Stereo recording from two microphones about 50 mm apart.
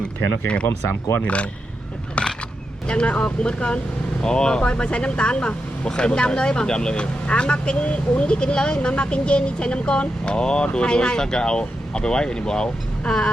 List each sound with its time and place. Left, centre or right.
0.4 s speech: left
2.8 s speech: left